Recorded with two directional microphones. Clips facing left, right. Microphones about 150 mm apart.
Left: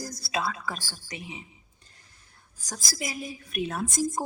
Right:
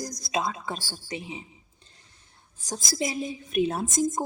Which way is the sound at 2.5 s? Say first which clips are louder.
Right 6 dB; 25° right (ahead or behind).